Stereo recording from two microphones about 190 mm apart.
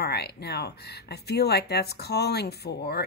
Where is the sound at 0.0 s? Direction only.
60° left (ahead or behind).